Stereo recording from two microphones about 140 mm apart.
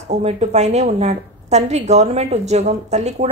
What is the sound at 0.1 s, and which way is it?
A woman's voice, 50° right (ahead or behind).